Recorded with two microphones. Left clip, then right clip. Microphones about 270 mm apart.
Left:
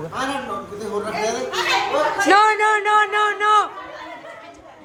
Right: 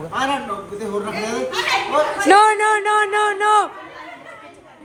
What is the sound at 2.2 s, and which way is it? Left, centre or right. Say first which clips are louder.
Speech: right 2 dB; centre.